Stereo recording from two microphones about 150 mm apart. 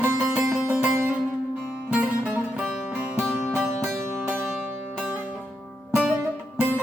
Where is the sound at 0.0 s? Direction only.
10° right (ahead or behind).